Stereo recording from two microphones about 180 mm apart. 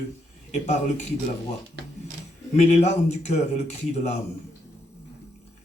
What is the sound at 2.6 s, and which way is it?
Speech, 40° left (ahead or behind).